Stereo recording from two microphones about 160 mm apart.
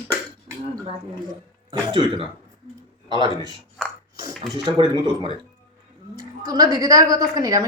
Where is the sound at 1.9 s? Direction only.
35° right (ahead or behind).